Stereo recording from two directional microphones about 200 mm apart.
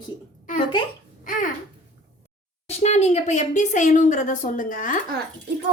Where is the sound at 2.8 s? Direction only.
35° left (ahead or behind).